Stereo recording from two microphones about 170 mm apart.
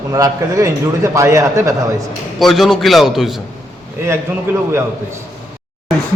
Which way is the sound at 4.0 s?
15° right (ahead or behind).